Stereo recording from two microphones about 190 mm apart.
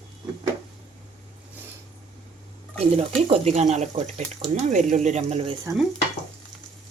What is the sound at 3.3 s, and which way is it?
Speech, 35° right (ahead or behind).